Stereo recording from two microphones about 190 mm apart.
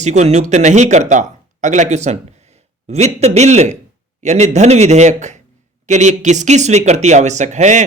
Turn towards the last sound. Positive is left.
turn(degrees=-40)  # may be behind; listen again after turning